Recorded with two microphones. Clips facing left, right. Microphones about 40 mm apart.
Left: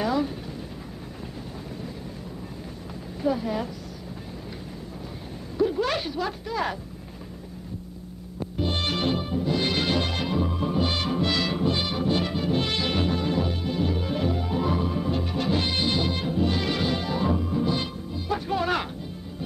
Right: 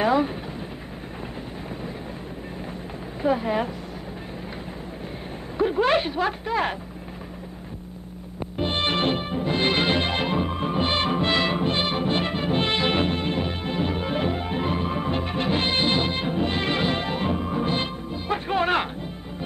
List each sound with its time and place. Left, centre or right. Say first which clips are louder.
0.0 s vehicle: right 4 dB; right
3.2 s speech: right 3 dB; right
5.6 s speech: right 4 dB; right
8.5 s music: right 3 dB; right